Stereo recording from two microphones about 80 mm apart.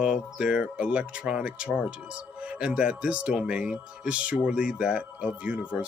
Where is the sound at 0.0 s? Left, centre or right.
Centre.